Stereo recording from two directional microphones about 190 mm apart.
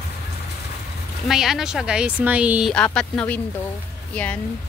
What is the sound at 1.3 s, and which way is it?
Speech, centre (ahead or behind).